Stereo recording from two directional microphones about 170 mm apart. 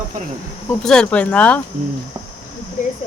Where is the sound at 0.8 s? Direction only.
5° left (ahead or behind).